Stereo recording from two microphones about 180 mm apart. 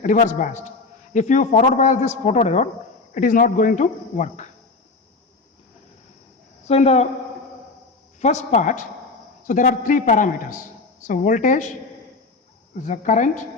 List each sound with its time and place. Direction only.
0.0 s a man's voice: 45° left (ahead or behind)
6.7 s a man's voice: 35° left (ahead or behind)
8.2 s a man's voice: 40° left (ahead or behind)
12.7 s speech: 45° left (ahead or behind)